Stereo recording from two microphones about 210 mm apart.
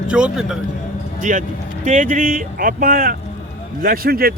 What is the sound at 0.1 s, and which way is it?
Speech, 5° right (ahead or behind).